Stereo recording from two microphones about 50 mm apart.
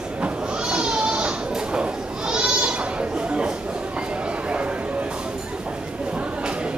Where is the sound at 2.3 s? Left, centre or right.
Centre.